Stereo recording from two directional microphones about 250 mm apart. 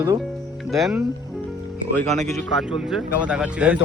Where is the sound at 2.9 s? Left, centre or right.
Centre.